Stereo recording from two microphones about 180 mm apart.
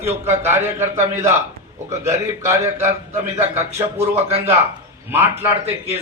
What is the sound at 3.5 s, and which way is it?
Speech, 15° right (ahead or behind).